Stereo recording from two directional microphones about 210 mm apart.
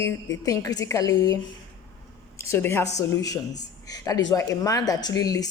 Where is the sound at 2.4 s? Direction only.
10° left (ahead or behind).